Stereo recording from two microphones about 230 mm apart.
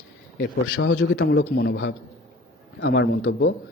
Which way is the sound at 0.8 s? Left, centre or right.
Left.